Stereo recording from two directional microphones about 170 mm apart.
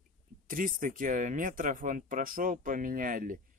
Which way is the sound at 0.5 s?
55° right (ahead or behind).